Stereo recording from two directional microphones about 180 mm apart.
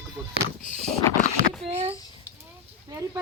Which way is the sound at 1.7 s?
35° right (ahead or behind).